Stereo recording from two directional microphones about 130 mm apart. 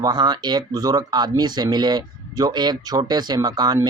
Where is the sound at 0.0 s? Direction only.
35° right (ahead or behind).